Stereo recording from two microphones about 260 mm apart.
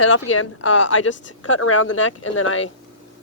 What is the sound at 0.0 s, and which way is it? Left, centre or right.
A woman's voice, left.